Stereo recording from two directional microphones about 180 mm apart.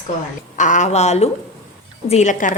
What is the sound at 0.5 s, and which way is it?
Frying, 45° left (ahead or behind).